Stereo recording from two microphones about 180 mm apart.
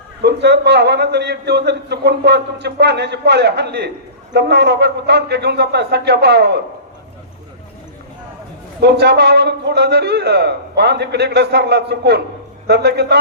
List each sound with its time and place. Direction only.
0.2 s a man's voice: 70° right (ahead or behind)
8.8 s a man's voice: 65° right (ahead or behind)